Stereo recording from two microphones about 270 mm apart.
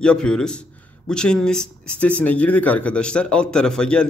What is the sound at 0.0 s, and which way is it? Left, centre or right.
A man's voice, centre.